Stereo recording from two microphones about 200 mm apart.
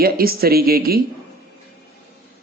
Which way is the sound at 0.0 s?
50° right (ahead or behind).